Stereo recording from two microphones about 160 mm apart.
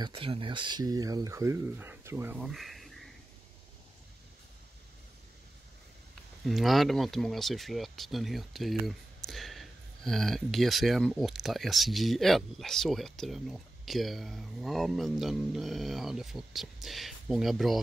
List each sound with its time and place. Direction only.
0.0 s speech: 35° right (ahead or behind); by 2.3 s 15° right (ahead or behind)
2.3 s speech: centre (ahead or behind)
6.4 s speech: centre (ahead or behind)